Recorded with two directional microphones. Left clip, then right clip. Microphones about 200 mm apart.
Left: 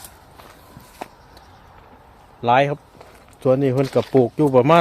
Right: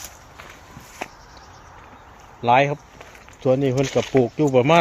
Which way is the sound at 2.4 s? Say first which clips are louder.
Even; 15° left (ahead or behind).